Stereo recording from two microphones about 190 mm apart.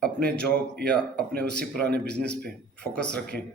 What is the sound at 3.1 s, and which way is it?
Speech, 55° right (ahead or behind).